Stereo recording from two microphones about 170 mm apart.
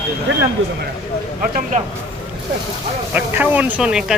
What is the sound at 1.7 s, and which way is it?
Speech, 45° right (ahead or behind).